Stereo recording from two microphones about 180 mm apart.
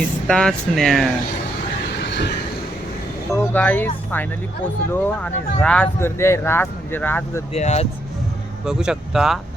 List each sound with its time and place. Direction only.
0.0 s speech: 5° left (ahead or behind)
2.0 s a sound: 75° left (ahead or behind)
3.3 s speech: 10° left (ahead or behind)
7.5 s speech: 35° left (ahead or behind)
8.6 s speech: 5° right (ahead or behind)